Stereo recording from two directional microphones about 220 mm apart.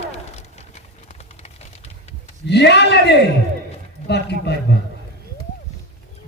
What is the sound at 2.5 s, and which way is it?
A man's voice, 50° left (ahead or behind).